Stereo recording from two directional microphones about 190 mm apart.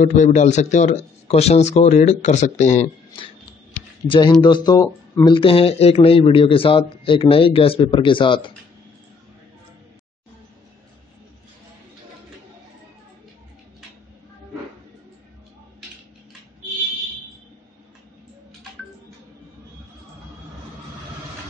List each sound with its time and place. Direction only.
0.0 s speech: 40° left (ahead or behind)